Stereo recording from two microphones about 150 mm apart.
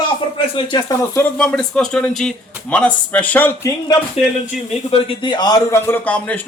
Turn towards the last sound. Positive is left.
turn(degrees=10)  # may be behind; listen again after turning